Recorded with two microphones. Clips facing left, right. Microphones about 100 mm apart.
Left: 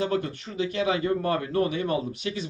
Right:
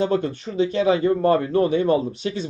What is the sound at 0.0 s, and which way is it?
Speech, 30° right (ahead or behind).